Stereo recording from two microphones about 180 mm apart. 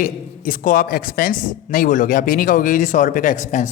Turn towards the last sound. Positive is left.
turn(degrees=45)  # may be behind; listen again after turning